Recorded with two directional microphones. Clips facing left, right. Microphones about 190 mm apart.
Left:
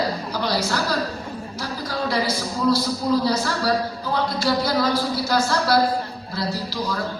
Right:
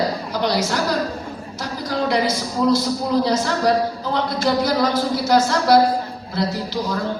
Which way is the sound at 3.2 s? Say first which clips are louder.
Right 3 dB; 20° right (ahead or behind).